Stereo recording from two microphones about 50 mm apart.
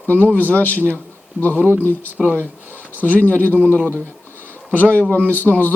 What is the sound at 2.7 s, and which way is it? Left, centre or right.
Speech, left.